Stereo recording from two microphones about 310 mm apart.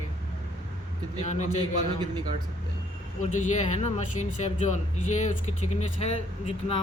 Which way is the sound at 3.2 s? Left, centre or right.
Left.